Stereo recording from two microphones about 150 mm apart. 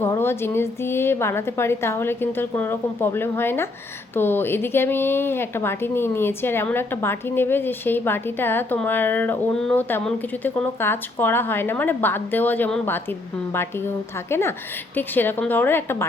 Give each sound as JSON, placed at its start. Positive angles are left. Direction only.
{"t": 0.0, "sound": "a woman's voice", "side_deg": 15}